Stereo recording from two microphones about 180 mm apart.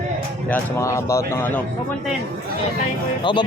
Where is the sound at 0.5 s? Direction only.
15° left (ahead or behind).